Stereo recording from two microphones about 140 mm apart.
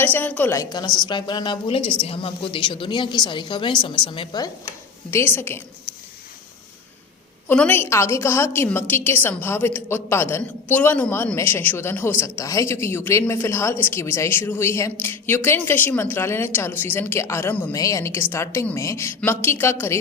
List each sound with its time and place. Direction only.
0.0 s a woman's voice: 10° left (ahead or behind); by 4.5 s 30° left (ahead or behind)
5.1 s a woman's voice: 15° left (ahead or behind)
7.4 s a woman's voice: 10° left (ahead or behind)